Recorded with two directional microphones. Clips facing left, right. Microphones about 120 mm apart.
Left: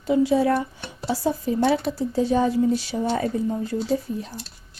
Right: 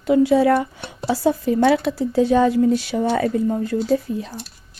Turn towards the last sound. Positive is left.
turn(degrees=-85)